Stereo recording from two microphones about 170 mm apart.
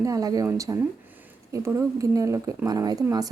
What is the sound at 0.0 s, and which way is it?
A woman's voice, 20° right (ahead or behind).